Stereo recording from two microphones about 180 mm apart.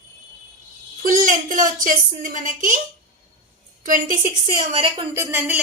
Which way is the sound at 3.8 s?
45° right (ahead or behind).